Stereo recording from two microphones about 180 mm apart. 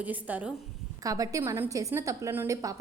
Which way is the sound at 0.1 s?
10° right (ahead or behind).